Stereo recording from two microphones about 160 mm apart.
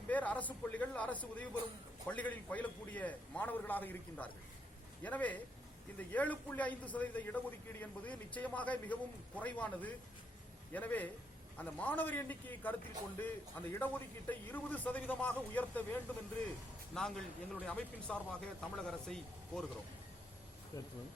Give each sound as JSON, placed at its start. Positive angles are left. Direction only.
{"t": 0.1, "sound": "a man's voice", "side_deg": 10}
{"t": 20.7, "sound": "speech", "side_deg": 20}